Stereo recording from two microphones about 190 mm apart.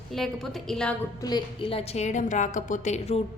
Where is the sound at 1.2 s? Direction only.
20° left (ahead or behind).